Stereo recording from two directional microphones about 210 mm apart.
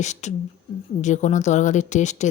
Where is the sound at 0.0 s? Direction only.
35° left (ahead or behind).